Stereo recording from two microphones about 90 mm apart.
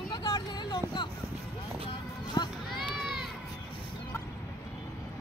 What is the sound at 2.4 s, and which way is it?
Run, 45° left (ahead or behind).